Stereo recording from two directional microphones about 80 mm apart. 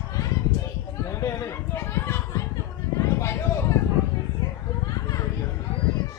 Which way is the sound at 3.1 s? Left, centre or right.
Left.